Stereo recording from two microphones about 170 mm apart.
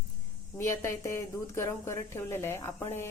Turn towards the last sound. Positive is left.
turn(degrees=15)  # may be behind; listen again after turning